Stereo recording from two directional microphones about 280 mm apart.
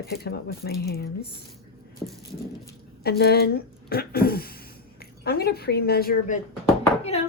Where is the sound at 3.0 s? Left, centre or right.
Left.